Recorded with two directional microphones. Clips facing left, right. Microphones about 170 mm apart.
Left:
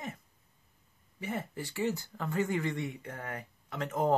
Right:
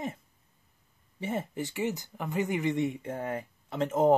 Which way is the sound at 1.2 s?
25° right (ahead or behind).